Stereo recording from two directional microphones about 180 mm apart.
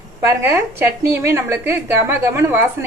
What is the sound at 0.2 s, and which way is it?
A woman's voice, 15° right (ahead or behind).